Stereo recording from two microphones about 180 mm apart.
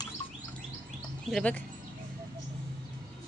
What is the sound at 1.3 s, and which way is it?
Speech, 5° left (ahead or behind).